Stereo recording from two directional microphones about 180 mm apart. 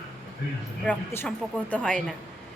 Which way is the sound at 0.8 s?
10° left (ahead or behind).